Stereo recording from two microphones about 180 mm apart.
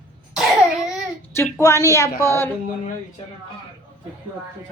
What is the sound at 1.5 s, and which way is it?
Speech, 15° left (ahead or behind).